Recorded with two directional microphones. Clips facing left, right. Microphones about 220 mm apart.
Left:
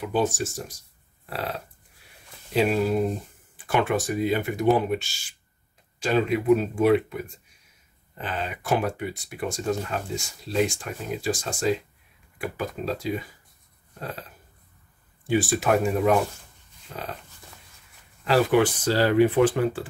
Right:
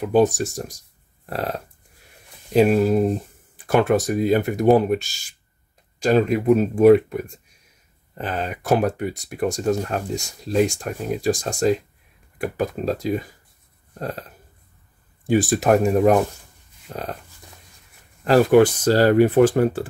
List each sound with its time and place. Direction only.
0.0 s speech: 45° right (ahead or behind)
1.2 s a sound: 45° right (ahead or behind)
2.5 s speech: 45° right (ahead or behind)
15.2 s speech: 40° right (ahead or behind)
16.9 s a sound: 40° right (ahead or behind)
18.2 s speech: 45° right (ahead or behind)